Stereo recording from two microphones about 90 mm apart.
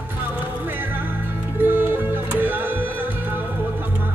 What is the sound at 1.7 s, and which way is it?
Music, 20° right (ahead or behind).